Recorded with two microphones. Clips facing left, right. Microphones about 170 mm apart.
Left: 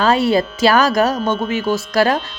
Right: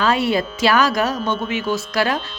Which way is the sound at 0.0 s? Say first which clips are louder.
Left 4 dB; 35° left (ahead or behind).